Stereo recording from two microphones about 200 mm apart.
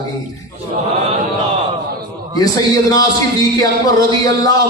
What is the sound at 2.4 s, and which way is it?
A man's voice, 20° left (ahead or behind).